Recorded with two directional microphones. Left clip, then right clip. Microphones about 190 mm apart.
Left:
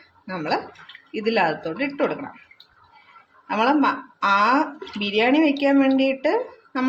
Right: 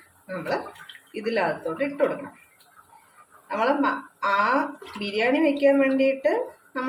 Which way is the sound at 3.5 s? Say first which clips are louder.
Left 3 dB; 45° left (ahead or behind).